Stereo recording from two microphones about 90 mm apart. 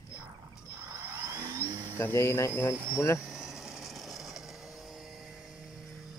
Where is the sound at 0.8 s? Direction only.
40° right (ahead or behind).